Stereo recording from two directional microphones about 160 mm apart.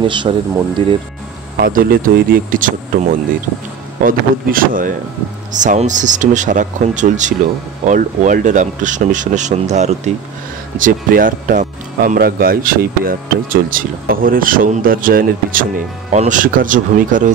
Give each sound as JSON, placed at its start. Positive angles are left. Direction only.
{"t": 0.0, "sound": "speech", "side_deg": -30}
{"t": 1.6, "sound": "speech", "side_deg": -65}
{"t": 10.8, "sound": "speech", "side_deg": -60}